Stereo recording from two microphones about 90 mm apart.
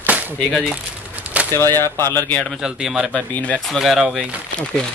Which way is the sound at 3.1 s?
10° left (ahead or behind).